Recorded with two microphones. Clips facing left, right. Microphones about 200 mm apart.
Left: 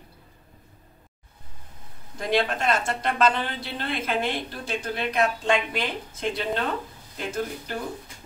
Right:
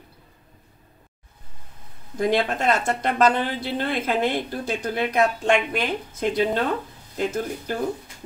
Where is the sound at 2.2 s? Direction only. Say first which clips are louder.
Right 3 dB; 50° right (ahead or behind).